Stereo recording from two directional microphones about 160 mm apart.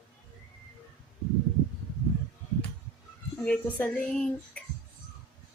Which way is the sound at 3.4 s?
10° left (ahead or behind).